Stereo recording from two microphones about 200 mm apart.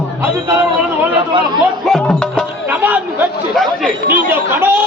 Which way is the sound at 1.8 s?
5° left (ahead or behind).